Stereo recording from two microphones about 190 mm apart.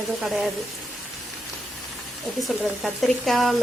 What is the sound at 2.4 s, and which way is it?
Speech, centre (ahead or behind).